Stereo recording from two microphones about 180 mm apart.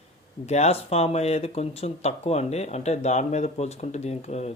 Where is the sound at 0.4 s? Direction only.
35° left (ahead or behind).